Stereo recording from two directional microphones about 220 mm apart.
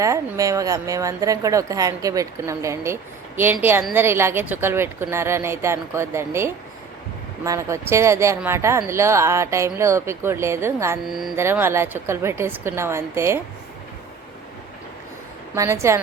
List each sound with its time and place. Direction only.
0.0 s a woman's voice: 15° right (ahead or behind)
11.0 s a woman's voice: centre (ahead or behind)
15.5 s a woman's voice: 15° right (ahead or behind)